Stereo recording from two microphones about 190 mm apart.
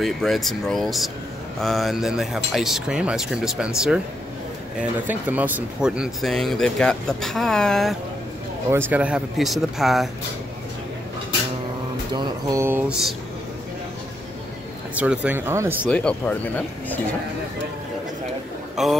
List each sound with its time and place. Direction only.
0.0 s speech: centre (ahead or behind)
5.0 s speech: 10° right (ahead or behind)
8.6 s speech: 10° right (ahead or behind)
12.1 s speech: 20° right (ahead or behind)
15.0 s speech: 5° right (ahead or behind)
15.9 s speech: 5° left (ahead or behind)
18.8 s speech: centre (ahead or behind)